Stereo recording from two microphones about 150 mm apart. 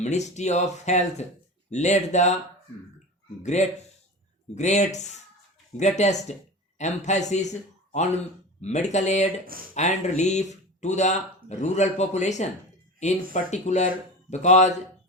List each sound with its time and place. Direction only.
0.0 s speech: 50° left (ahead or behind)
3.4 s speech: 50° left (ahead or behind)
8.6 s speech: 50° left (ahead or behind)